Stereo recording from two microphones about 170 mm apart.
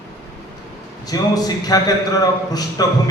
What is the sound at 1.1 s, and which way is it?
A man's voice, 20° left (ahead or behind).